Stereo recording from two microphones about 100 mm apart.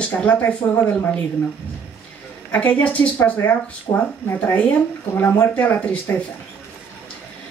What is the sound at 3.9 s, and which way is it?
Speech, 50° left (ahead or behind).